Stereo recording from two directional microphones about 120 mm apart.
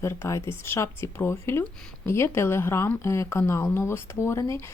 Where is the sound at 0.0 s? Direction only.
25° left (ahead or behind).